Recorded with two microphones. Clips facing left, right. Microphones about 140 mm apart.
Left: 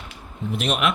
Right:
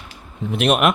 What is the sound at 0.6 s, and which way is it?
Speech, 55° right (ahead or behind).